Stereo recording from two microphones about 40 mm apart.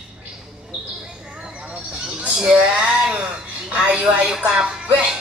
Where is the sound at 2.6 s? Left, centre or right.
Right.